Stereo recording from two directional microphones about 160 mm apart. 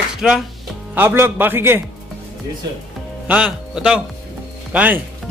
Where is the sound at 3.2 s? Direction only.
5° right (ahead or behind).